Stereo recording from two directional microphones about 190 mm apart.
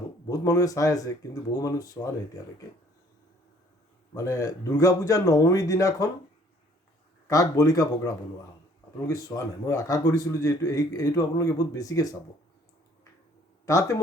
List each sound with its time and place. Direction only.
0.3 s a man's voice: 20° left (ahead or behind)
4.1 s a man's voice: 15° left (ahead or behind)
7.3 s a man's voice: 15° left (ahead or behind)
13.7 s a man's voice: 15° left (ahead or behind)